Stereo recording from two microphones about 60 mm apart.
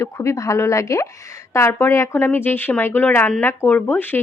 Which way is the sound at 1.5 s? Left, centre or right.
Left.